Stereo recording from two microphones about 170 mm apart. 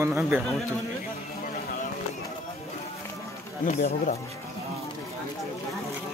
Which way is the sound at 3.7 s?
45° left (ahead or behind).